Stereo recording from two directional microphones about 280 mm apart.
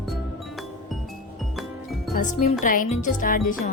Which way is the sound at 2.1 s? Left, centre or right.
Left.